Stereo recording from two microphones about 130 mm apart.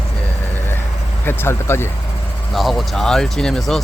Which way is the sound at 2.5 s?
Centre (ahead or behind).